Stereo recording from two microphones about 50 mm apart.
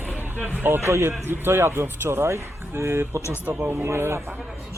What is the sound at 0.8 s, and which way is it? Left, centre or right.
Speech, right.